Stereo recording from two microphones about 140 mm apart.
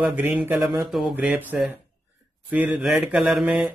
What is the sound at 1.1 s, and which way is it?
A man's voice, 10° right (ahead or behind).